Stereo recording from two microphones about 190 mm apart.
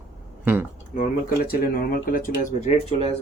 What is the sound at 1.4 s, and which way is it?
Speech, 50° left (ahead or behind).